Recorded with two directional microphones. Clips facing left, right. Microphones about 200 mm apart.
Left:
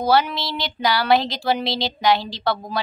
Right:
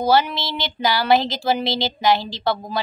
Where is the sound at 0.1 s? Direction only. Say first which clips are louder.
Even; centre (ahead or behind).